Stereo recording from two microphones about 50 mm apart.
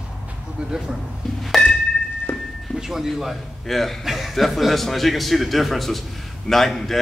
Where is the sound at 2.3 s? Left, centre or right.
Left.